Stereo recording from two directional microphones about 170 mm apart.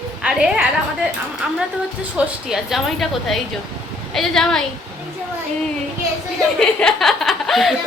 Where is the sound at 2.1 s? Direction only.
5° right (ahead or behind).